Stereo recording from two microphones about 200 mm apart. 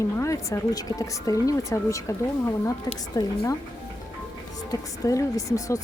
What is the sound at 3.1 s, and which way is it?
Speech, 20° left (ahead or behind).